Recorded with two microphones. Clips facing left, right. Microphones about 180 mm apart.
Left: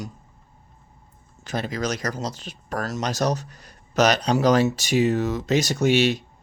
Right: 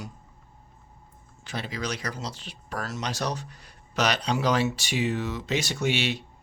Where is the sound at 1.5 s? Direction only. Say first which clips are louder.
Left 6 dB; 45° left (ahead or behind).